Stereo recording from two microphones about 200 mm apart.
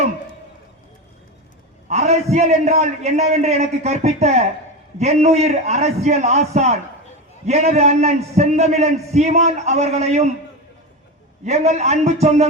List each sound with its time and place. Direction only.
1.9 s a man's voice: 35° right (ahead or behind)
11.4 s a man's voice: 35° right (ahead or behind)